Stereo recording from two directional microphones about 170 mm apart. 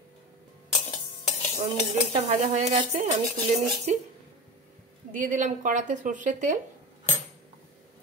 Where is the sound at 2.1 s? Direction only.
40° right (ahead or behind).